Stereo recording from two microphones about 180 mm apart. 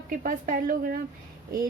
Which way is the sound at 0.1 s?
50° right (ahead or behind).